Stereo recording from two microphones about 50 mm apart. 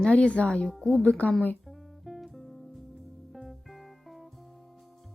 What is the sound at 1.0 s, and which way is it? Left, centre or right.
Speech, left.